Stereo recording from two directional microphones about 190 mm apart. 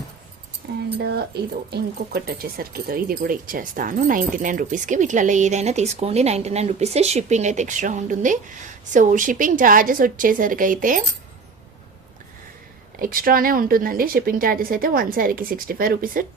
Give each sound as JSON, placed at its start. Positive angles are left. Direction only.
{"t": 0.9, "sound": "speech", "side_deg": -55}
{"t": 13.0, "sound": "speech", "side_deg": -50}